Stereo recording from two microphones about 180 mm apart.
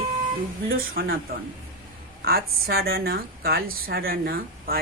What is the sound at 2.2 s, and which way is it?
A woman's voice, 60° right (ahead or behind).